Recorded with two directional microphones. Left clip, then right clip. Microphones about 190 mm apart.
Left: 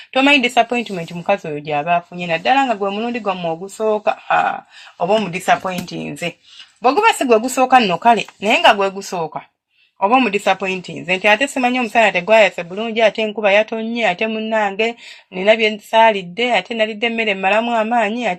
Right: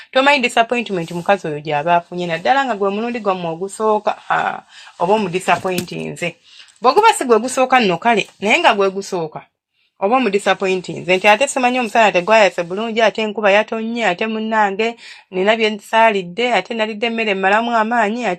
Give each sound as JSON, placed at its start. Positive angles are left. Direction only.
{"t": 0.1, "sound": "speech", "side_deg": -20}
{"t": 4.9, "sound": "speech", "side_deg": -10}